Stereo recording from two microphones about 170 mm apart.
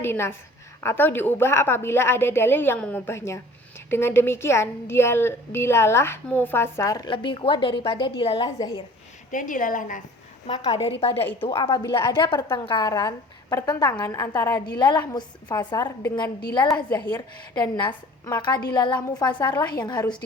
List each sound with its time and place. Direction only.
0.0 s a woman's voice: 15° left (ahead or behind); by 8.4 s 30° left (ahead or behind)
8.4 s a woman's voice: 20° left (ahead or behind)
9.3 s a woman's voice: 50° left (ahead or behind)
10.4 s a woman's voice: 35° left (ahead or behind)
11.2 s a woman's voice: 10° left (ahead or behind)